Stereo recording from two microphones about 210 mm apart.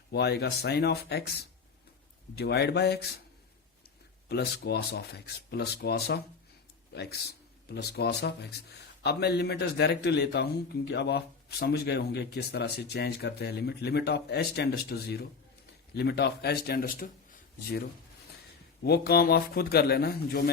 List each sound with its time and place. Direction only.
0.1 s a man's voice: 50° left (ahead or behind)
4.3 s a man's voice: 50° left (ahead or behind)